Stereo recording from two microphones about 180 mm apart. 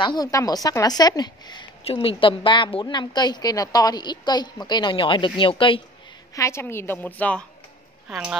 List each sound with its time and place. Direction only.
0.0 s a woman's voice: 20° left (ahead or behind)
6.3 s a woman's voice: 15° left (ahead or behind)
8.1 s a woman's voice: 5° right (ahead or behind)